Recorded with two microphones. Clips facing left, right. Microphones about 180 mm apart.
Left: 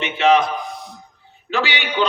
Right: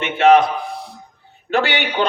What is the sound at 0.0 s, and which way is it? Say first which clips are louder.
Speech: right 3 dB; 55° right (ahead or behind).